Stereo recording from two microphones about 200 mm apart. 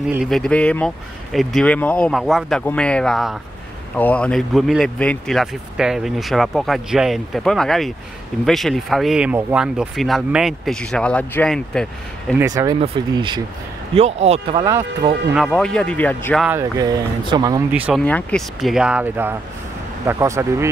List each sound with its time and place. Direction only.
0.1 s speech: centre (ahead or behind)
12.4 s speech: 15° right (ahead or behind); by 14.6 s 30° right (ahead or behind)
14.6 s speech: 15° right (ahead or behind)
15.3 s speech: centre (ahead or behind)
16.4 s speech: 15° right (ahead or behind)
17.7 s speech: 5° right (ahead or behind)
18.0 s speech: 5° left (ahead or behind); by 20.7 s 15° right (ahead or behind)